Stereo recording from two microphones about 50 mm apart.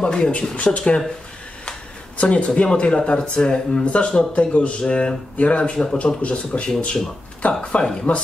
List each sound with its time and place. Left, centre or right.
0.0 s speech: centre